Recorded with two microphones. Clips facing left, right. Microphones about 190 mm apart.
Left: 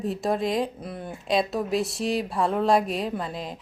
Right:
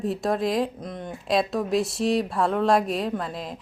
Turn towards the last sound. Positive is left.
turn(degrees=0)  # may be behind; listen again after turning